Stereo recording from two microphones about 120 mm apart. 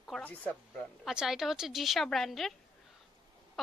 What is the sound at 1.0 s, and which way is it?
A woman's voice, 5° right (ahead or behind).